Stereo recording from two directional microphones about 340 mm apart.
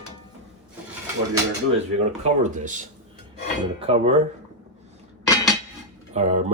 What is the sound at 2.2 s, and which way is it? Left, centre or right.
Speech, right.